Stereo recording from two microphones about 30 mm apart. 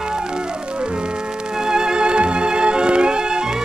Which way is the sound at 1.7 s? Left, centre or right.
Right.